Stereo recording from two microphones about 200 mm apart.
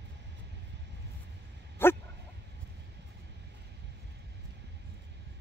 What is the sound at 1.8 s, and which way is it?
Dog, 10° left (ahead or behind).